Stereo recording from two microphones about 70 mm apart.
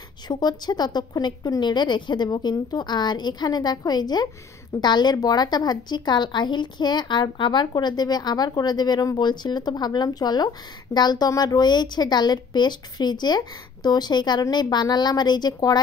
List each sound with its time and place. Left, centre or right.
0.3 s speech: left
4.7 s speech: left